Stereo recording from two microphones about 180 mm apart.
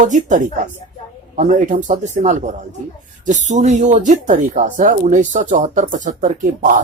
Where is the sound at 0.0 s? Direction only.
45° right (ahead or behind).